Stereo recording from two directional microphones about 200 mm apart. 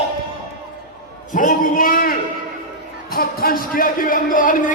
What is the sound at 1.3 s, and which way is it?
Speech, 40° left (ahead or behind).